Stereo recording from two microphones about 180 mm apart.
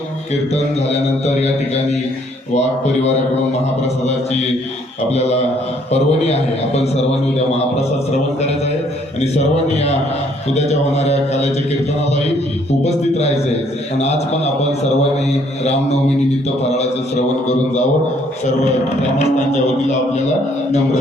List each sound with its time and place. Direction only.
2.6 s a man's voice: 35° left (ahead or behind)
5.1 s a man's voice: 35° left (ahead or behind)
12.8 s a man's voice: 35° left (ahead or behind)